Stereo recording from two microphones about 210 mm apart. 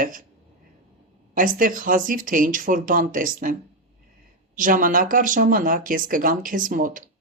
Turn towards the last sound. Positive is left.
turn(degrees=-40)  # may be behind; listen again after turning